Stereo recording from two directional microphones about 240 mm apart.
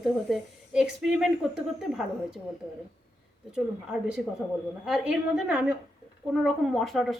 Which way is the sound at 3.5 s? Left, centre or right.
Centre.